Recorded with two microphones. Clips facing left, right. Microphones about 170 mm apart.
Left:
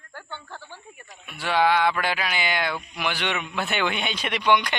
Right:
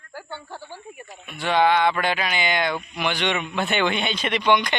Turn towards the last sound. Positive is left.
turn(degrees=5)  # may be behind; listen again after turning